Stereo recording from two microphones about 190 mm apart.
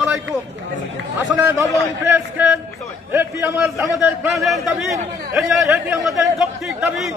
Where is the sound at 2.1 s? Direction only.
5° right (ahead or behind).